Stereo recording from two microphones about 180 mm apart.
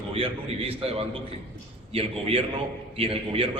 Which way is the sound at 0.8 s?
30° right (ahead or behind).